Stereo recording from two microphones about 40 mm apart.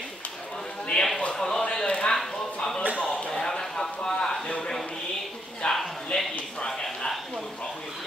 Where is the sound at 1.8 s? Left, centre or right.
Left.